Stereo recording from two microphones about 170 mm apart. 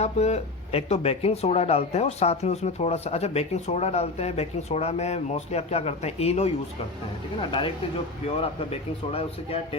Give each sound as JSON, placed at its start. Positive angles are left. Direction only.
{"t": 0.0, "sound": "speech", "side_deg": 40}
{"t": 8.4, "sound": "speech", "side_deg": 35}